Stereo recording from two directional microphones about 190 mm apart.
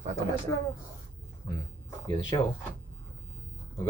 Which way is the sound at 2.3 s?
20° left (ahead or behind).